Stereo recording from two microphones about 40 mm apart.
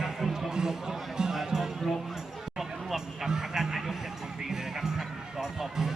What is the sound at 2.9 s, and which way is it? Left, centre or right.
Music, centre.